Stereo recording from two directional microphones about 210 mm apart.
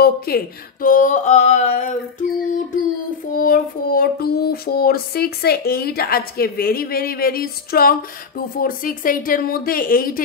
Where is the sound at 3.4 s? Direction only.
45° left (ahead or behind).